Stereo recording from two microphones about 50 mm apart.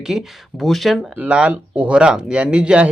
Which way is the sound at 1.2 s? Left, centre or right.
Right.